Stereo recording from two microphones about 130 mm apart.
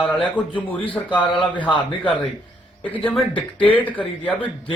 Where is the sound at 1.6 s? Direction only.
35° left (ahead or behind).